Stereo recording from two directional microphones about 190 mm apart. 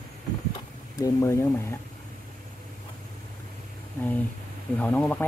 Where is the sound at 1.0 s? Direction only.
15° left (ahead or behind).